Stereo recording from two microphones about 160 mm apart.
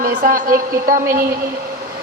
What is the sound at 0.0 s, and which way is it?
A woman's voice, 55° right (ahead or behind).